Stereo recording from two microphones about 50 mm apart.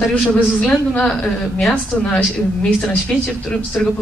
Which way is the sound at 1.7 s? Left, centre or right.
Left.